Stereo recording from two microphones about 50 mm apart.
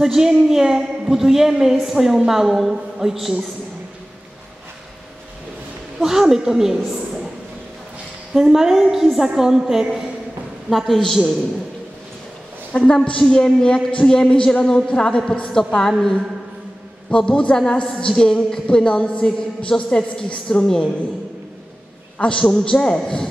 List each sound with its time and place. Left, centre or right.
0.0 s a woman's voice: centre
6.0 s a woman's voice: centre
8.3 s a woman's voice: centre
12.7 s a woman's voice: centre
22.4 s a woman's voice: centre